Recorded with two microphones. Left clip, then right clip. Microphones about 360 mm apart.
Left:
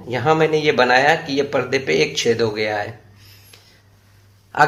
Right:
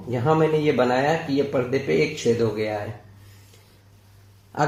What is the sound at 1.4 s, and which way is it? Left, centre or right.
Speech, left.